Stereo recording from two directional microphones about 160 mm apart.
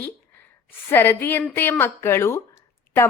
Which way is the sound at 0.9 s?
15° left (ahead or behind).